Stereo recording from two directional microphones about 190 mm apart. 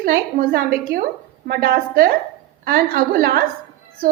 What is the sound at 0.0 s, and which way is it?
A woman's voice, 50° right (ahead or behind).